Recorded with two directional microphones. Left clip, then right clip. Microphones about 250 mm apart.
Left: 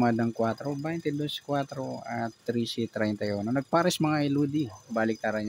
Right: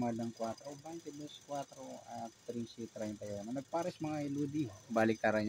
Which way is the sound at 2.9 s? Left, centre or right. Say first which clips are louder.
Left 12 dB; left.